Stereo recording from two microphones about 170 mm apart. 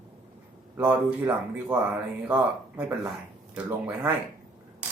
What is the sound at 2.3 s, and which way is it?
Speech, 10° right (ahead or behind).